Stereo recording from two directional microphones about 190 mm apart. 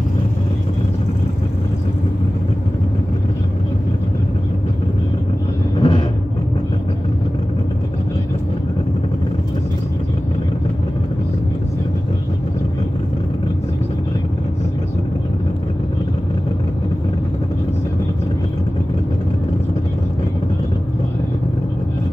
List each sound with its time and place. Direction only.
5.8 s vehicle: 25° left (ahead or behind)